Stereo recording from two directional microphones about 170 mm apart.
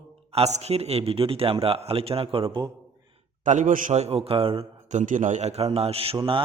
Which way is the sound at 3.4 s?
45° right (ahead or behind).